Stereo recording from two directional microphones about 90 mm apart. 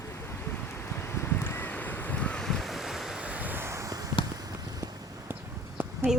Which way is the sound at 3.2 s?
15° right (ahead or behind).